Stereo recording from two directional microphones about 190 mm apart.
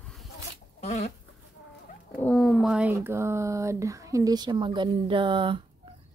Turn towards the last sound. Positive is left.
turn(degrees=-25)  # may be behind; listen again after turning